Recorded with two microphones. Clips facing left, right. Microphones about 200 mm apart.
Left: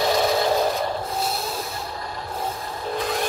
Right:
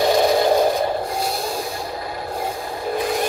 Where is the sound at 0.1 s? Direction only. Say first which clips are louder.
Right 5 dB; 50° right (ahead or behind).